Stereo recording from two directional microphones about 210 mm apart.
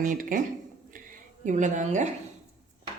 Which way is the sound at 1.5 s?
35° right (ahead or behind).